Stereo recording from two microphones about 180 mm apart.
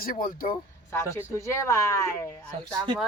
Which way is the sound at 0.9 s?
15° left (ahead or behind).